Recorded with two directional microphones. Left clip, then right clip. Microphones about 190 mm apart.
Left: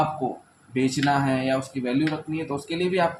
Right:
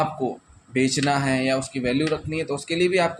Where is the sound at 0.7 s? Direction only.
35° right (ahead or behind).